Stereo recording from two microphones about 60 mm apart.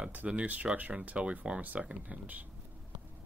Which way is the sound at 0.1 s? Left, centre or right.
Right.